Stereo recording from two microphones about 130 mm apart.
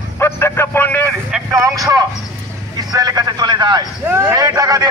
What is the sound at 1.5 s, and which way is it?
Speech, 25° right (ahead or behind).